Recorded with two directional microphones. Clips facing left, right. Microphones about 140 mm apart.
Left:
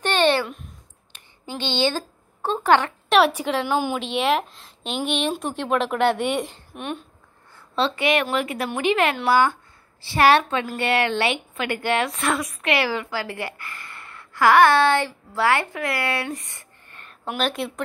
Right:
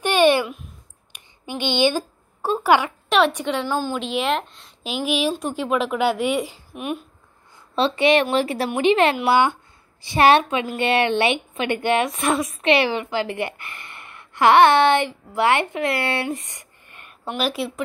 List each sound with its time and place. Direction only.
0.0 s a sound: 10° right (ahead or behind)
3.1 s a woman's voice: 5° left (ahead or behind)
3.6 s speech: 10° left (ahead or behind)
4.0 s a woman's voice: centre (ahead or behind)
7.5 s a woman's voice: 20° right (ahead or behind)
17.4 s a woman's voice: 5° right (ahead or behind)